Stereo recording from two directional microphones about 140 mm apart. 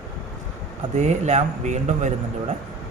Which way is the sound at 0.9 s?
55° right (ahead or behind).